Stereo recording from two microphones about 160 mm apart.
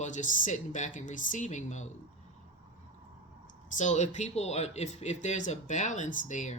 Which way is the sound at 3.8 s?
45° left (ahead or behind).